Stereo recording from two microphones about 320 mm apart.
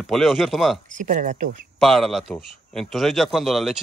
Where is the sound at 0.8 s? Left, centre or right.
Right.